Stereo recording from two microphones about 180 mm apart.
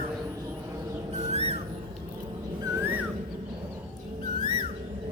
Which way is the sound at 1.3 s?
35° right (ahead or behind).